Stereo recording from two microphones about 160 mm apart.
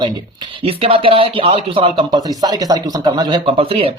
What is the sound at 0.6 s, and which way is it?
Speech, 35° right (ahead or behind).